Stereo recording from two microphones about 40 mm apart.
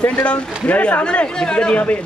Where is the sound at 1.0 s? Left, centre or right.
Left.